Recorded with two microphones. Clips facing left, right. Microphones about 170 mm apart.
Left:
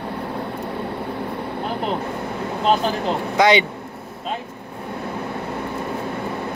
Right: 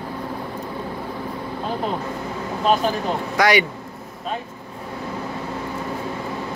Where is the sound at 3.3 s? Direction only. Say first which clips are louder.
Left 2 dB; 20° left (ahead or behind).